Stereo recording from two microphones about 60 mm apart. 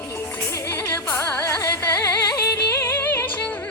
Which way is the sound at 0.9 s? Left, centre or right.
Left.